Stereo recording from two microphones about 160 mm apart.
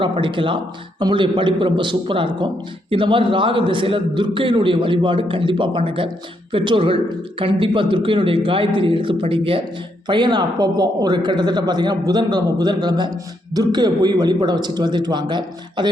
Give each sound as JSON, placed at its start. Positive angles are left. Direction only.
{"t": 0.0, "sound": "a man's voice", "side_deg": -30}